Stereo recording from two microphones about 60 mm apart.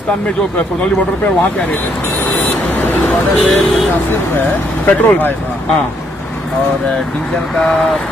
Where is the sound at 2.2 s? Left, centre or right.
Left.